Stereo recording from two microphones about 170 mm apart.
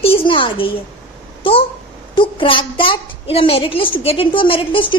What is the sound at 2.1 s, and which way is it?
A woman's voice, 30° left (ahead or behind).